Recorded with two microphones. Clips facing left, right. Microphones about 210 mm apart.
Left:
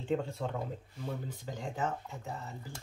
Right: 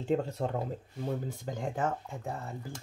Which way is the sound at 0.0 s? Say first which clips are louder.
Right 3 dB; 40° right (ahead or behind).